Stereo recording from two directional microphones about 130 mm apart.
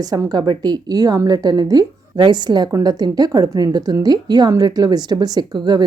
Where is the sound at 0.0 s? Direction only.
30° right (ahead or behind).